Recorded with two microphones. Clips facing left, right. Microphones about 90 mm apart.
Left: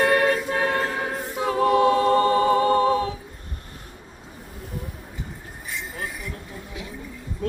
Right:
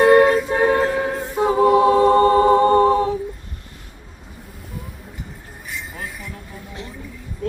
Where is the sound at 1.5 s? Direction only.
15° right (ahead or behind).